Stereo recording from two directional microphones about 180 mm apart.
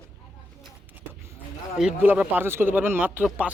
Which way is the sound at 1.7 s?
5° right (ahead or behind).